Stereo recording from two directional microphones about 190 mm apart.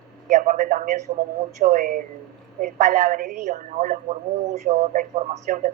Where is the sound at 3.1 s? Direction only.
40° right (ahead or behind).